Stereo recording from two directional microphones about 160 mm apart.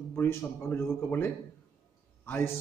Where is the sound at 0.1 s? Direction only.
15° left (ahead or behind).